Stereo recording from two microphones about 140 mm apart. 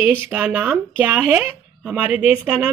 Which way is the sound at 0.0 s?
10° right (ahead or behind).